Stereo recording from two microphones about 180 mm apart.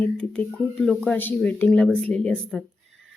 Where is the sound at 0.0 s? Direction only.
5° left (ahead or behind).